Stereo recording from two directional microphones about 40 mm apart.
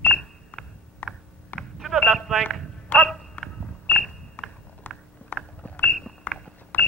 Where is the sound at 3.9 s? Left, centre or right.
Left.